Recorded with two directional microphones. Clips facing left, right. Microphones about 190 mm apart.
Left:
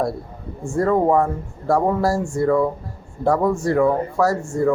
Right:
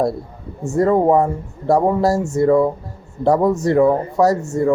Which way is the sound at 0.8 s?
20° right (ahead or behind).